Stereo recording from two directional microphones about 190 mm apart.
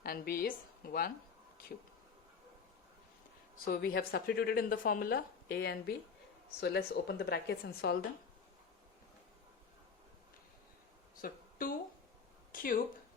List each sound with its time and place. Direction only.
0.0 s a woman's voice: 50° left (ahead or behind)
3.7 s speech: 50° left (ahead or behind)
11.2 s a sound: 50° left (ahead or behind)